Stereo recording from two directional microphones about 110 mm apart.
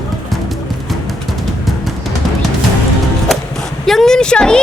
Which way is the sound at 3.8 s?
5° left (ahead or behind).